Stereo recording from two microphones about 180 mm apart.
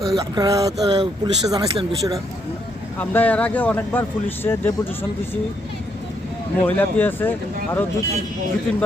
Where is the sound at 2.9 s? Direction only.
10° left (ahead or behind).